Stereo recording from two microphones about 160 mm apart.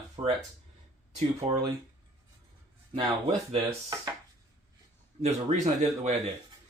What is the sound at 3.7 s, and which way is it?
Chopping, 20° right (ahead or behind).